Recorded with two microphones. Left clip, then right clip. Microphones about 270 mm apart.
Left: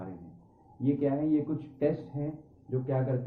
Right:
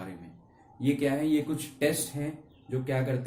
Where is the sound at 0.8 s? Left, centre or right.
Right.